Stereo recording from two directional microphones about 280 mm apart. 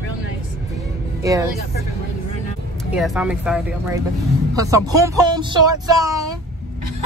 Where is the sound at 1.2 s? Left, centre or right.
Centre.